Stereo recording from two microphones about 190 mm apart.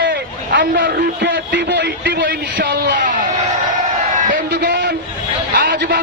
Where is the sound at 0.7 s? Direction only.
65° right (ahead or behind); by 3.1 s 50° right (ahead or behind).